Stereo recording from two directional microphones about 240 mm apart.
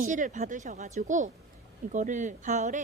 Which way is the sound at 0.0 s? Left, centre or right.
Right.